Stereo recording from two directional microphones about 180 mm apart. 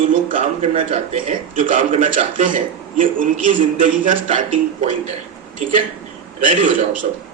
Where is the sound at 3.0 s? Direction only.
50° right (ahead or behind).